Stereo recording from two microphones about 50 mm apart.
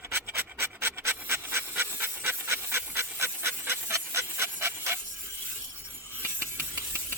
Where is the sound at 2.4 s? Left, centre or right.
Right.